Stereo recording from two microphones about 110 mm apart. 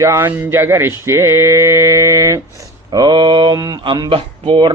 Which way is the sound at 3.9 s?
50° right (ahead or behind).